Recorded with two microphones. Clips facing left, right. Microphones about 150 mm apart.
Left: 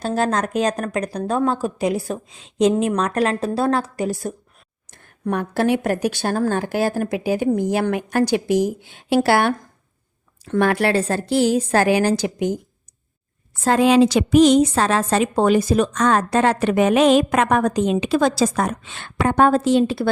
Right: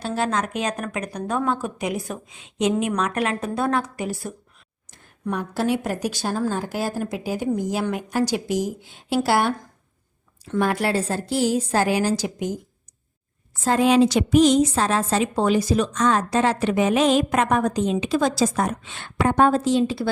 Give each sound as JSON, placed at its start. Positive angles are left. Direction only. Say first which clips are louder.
{"t": 0.0, "sound": "speech", "louder": "left 4 dB", "side_deg": 40}
{"t": 4.9, "sound": "a woman's voice", "louder": "left 4 dB", "side_deg": 55}
{"t": 13.7, "sound": "a woman's voice", "louder": "left 3 dB", "side_deg": 90}